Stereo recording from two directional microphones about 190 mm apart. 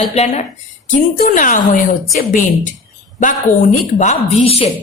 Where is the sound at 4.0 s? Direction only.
35° left (ahead or behind).